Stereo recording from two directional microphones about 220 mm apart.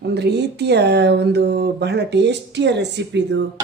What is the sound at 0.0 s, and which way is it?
Speech, 50° right (ahead or behind).